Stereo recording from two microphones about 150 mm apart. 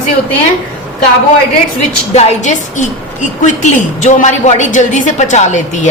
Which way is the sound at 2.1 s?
55° left (ahead or behind).